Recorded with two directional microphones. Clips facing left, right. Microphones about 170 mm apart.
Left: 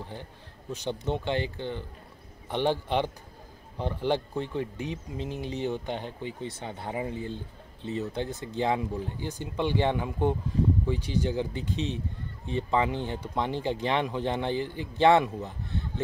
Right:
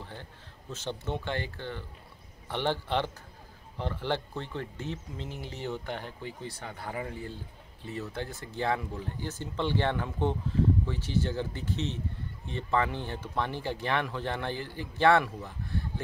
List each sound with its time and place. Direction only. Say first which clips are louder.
0.0 s speech: left 4 dB; 15° left (ahead or behind)